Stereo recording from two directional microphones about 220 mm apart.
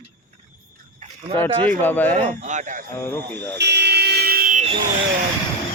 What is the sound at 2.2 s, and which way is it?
Speech, 30° right (ahead or behind).